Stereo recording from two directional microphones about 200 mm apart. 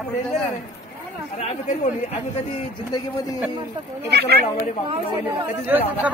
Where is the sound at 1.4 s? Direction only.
35° left (ahead or behind).